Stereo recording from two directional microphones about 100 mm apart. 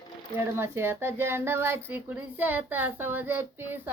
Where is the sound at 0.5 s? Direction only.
25° right (ahead or behind).